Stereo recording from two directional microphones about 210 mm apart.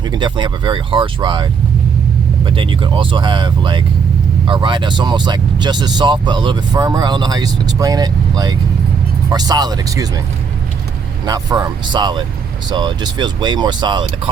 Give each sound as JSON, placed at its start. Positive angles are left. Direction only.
{"t": 0.1, "sound": "speech", "side_deg": -20}
{"t": 11.3, "sound": "speech", "side_deg": -20}